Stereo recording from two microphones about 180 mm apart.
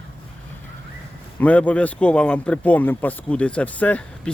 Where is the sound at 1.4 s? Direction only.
10° left (ahead or behind).